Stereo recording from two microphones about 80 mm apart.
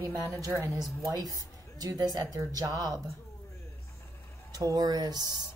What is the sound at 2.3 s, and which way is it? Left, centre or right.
Speech, right.